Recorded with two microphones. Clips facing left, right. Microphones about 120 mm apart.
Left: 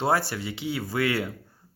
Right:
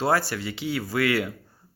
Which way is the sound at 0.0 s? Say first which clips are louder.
Right 1 dB; 20° left (ahead or behind).